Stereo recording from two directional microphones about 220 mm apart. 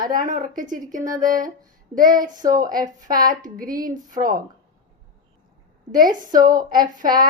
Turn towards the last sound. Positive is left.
turn(degrees=-40)  # may be behind; listen again after turning